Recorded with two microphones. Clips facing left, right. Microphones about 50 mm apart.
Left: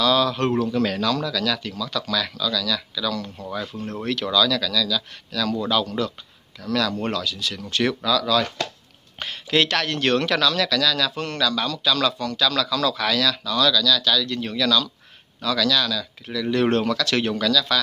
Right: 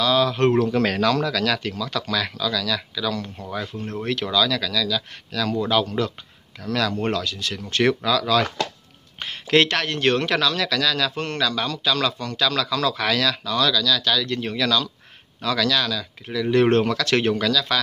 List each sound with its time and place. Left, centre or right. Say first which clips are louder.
0.0 s speech: right 1 dB; right
0.5 s speech: right 2 dB; right
3.7 s speech: even; centre
4.1 s speech: left 1 dB; right
9.5 s speech: right 2 dB; right